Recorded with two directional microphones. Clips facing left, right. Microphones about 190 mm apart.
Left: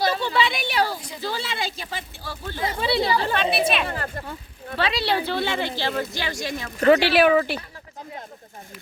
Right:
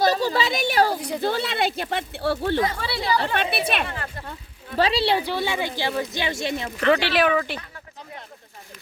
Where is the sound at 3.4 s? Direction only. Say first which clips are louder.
Left 2 dB; 55° right (ahead or behind).